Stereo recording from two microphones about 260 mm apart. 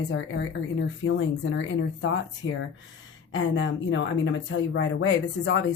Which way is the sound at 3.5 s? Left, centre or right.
Left.